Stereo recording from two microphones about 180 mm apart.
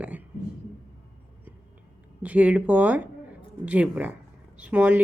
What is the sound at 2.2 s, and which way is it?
Speech, 10° right (ahead or behind).